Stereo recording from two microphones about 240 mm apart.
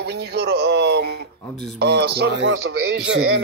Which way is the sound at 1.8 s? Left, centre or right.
Right.